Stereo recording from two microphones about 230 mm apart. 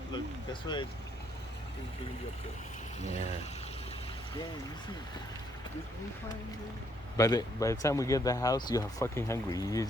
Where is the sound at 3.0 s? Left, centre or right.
Left.